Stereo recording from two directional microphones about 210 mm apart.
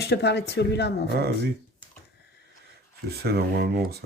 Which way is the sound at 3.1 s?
50° right (ahead or behind).